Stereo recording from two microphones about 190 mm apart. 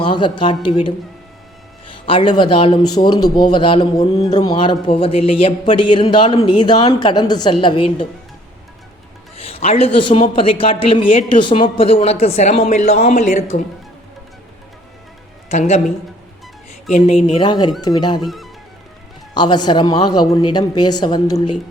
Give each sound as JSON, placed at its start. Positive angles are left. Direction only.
{"t": 0.0, "sound": "speech", "side_deg": 25}
{"t": 2.0, "sound": "speech", "side_deg": 25}
{"t": 4.3, "sound": "speech", "side_deg": 20}
{"t": 9.4, "sound": "speech", "side_deg": 30}
{"t": 15.4, "sound": "a woman's voice", "side_deg": 35}
{"t": 16.9, "sound": "speech", "side_deg": 30}
{"t": 18.2, "sound": "speech", "side_deg": 0}
{"t": 19.3, "sound": "speech", "side_deg": 25}